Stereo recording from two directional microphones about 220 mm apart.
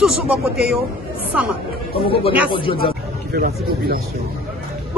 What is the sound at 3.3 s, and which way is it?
Speech, 40° right (ahead or behind).